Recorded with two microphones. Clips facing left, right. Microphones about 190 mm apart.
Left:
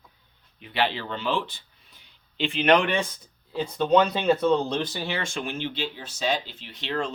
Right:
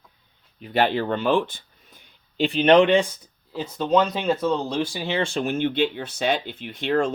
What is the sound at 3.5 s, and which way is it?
Speech, centre (ahead or behind).